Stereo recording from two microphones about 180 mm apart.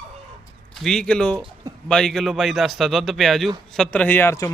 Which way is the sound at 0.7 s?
5° left (ahead or behind).